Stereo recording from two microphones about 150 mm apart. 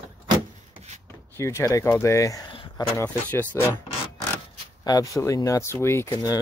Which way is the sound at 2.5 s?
35° left (ahead or behind).